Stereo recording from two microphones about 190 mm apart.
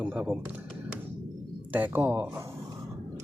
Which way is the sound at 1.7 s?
10° right (ahead or behind).